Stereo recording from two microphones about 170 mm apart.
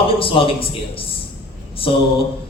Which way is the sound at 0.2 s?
35° left (ahead or behind).